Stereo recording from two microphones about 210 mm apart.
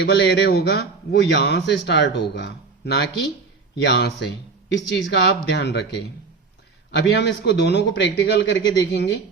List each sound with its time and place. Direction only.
0.0 s a man's voice: 55° left (ahead or behind)
6.9 s a man's voice: 55° left (ahead or behind)